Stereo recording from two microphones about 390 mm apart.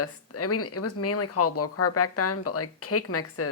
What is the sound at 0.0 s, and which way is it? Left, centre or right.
Speech, left.